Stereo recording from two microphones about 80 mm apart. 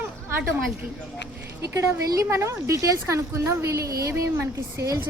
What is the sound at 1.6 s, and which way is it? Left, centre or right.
Speech, right.